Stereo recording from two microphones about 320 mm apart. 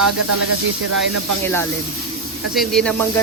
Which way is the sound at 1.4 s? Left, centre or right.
Centre.